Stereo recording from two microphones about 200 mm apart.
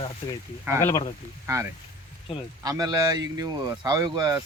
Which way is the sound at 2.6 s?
20° right (ahead or behind).